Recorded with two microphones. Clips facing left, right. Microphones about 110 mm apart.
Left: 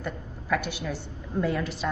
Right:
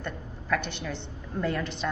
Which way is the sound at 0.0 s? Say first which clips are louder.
Left 2 dB; 5° left (ahead or behind).